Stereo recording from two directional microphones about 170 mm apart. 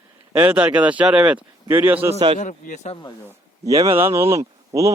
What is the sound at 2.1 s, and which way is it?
Speech, 35° right (ahead or behind).